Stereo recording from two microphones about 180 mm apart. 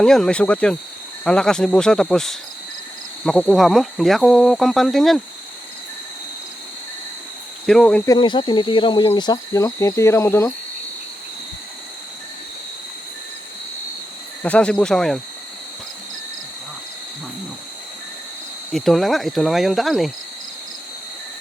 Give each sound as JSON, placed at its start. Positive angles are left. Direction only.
{"t": 0.0, "sound": "speech", "side_deg": 5}
{"t": 7.7, "sound": "speech", "side_deg": 5}
{"t": 8.0, "sound": "speech", "side_deg": 25}
{"t": 14.4, "sound": "speech", "side_deg": 5}
{"t": 18.7, "sound": "speech", "side_deg": 0}